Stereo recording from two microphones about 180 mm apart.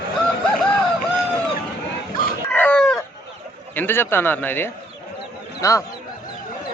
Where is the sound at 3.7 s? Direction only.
10° left (ahead or behind).